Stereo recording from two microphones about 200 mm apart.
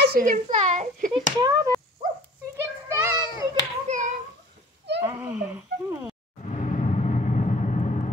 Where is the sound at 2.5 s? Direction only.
10° right (ahead or behind).